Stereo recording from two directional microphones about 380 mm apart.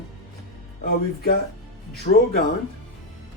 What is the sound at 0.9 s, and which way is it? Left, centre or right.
Speech, left.